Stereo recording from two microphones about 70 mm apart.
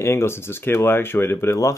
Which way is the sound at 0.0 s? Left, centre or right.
Left.